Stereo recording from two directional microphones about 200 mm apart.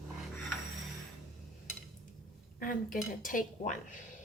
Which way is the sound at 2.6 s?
45° left (ahead or behind).